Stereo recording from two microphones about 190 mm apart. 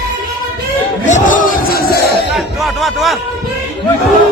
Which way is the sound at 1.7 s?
55° left (ahead or behind).